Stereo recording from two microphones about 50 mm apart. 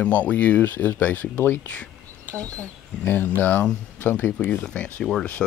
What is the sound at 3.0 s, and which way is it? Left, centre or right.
Speech, left.